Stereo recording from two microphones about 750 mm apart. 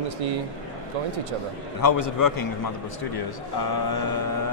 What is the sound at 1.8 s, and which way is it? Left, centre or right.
Speech, left.